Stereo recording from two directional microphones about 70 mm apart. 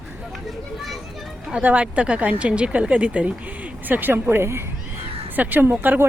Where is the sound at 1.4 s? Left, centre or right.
Centre.